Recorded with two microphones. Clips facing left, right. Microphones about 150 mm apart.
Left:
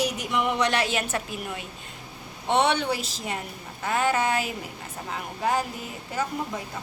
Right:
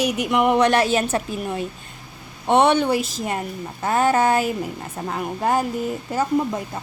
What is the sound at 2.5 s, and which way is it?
A child's voice, 50° right (ahead or behind).